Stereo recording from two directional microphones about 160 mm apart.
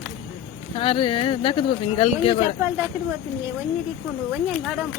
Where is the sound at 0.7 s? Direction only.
35° left (ahead or behind).